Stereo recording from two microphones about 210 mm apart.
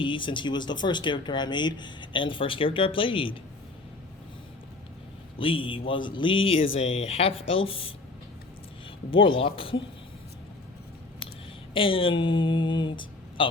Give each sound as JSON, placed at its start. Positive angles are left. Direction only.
{"t": 0.0, "sound": "speech", "side_deg": 25}
{"t": 5.4, "sound": "speech", "side_deg": 25}
{"t": 9.0, "sound": "speech", "side_deg": 25}
{"t": 11.7, "sound": "speech", "side_deg": 25}